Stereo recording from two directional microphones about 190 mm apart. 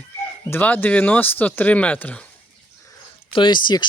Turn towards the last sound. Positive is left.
turn(degrees=25)  # may be behind; listen again after turning